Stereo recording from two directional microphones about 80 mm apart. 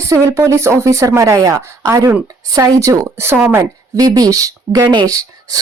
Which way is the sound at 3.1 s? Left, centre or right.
Right.